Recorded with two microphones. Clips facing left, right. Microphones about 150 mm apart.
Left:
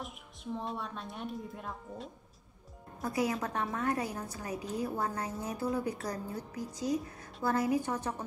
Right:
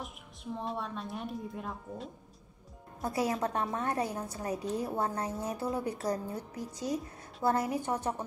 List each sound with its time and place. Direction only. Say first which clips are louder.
0.0 s a woman's voice: even; centre (ahead or behind)
3.0 s a woman's voice: right 1 dB; 25° right (ahead or behind)